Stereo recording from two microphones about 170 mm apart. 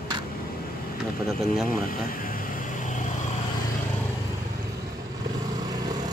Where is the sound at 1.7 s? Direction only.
55° left (ahead or behind).